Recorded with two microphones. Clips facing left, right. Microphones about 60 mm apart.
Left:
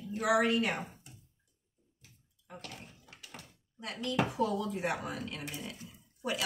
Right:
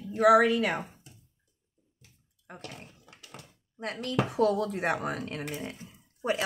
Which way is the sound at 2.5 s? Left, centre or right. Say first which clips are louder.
Right 2 dB; right.